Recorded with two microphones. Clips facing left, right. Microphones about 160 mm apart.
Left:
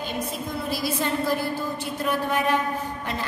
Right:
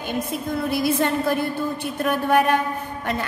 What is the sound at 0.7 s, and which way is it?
A woman's voice, 55° right (ahead or behind).